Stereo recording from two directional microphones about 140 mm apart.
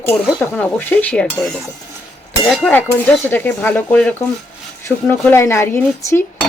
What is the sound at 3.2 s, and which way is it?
A woman's voice, 15° left (ahead or behind).